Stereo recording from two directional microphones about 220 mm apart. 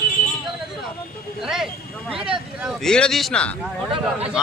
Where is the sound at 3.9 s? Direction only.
25° right (ahead or behind).